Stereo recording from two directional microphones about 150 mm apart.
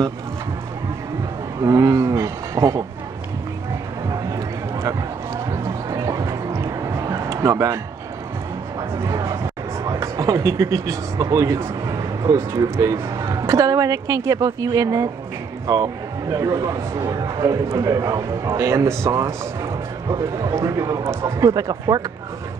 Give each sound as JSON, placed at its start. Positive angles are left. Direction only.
{"t": 1.6, "sound": "speech", "side_deg": -20}
{"t": 4.1, "sound": "a sound", "side_deg": -20}
{"t": 5.5, "sound": "music", "side_deg": -20}
{"t": 8.9, "sound": "a man's voice", "side_deg": -20}